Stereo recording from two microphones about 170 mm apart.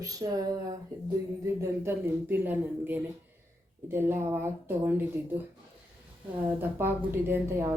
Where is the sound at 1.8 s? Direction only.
10° right (ahead or behind).